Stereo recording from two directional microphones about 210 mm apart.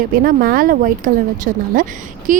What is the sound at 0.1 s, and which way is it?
A woman's voice, 45° right (ahead or behind).